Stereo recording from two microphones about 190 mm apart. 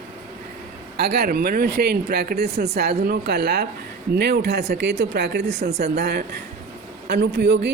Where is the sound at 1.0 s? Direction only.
55° right (ahead or behind).